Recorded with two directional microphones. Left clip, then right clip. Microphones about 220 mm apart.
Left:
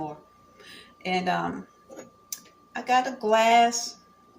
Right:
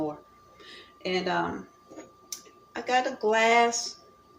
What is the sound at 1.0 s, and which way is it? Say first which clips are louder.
Speech: left 2 dB; 15° right (ahead or behind).